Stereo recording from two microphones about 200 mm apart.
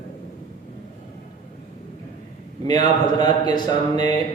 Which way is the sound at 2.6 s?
20° left (ahead or behind).